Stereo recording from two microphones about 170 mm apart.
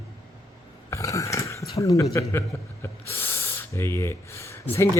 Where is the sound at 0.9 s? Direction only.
20° left (ahead or behind).